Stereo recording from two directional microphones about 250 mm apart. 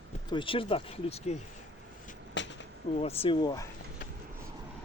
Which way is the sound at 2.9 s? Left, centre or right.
Left.